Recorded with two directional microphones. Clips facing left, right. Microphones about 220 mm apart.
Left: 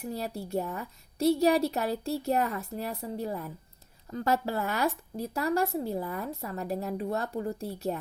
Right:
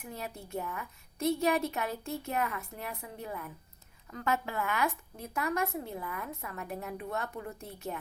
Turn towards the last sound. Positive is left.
turn(degrees=35)  # may be behind; listen again after turning